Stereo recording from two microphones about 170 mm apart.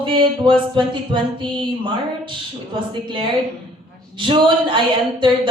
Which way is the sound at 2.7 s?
30° right (ahead or behind).